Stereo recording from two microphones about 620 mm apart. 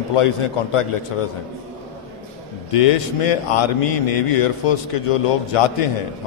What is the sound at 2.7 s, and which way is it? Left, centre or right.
A man's voice, left.